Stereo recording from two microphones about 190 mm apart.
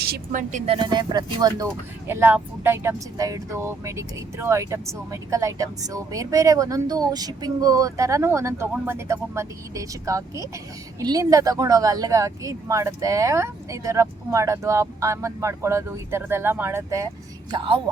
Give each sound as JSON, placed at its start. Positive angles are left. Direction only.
{"t": 0.3, "sound": "speech", "side_deg": -40}
{"t": 17.5, "sound": "a woman's voice", "side_deg": -25}